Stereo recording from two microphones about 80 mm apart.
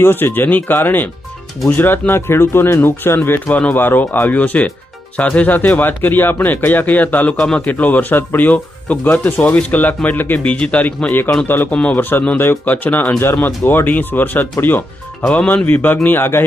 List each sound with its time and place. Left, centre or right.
0.0 s speech: left
11.7 s speech: centre
11.9 s speech: left